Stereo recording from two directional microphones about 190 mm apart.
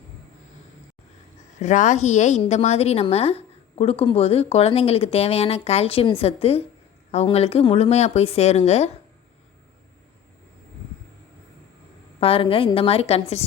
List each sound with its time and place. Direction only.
1.5 s a woman's voice: 40° left (ahead or behind)
12.2 s a woman's voice: 30° left (ahead or behind)